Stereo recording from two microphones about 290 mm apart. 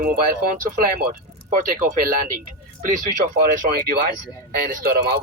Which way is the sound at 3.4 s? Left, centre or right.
Right.